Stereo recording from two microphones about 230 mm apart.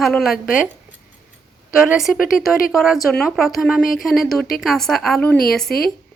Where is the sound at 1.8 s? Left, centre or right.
Centre.